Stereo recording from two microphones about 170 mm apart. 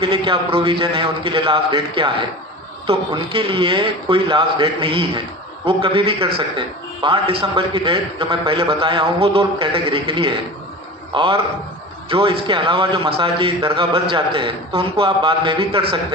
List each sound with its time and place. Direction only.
0.0 s a man's voice: 30° right (ahead or behind)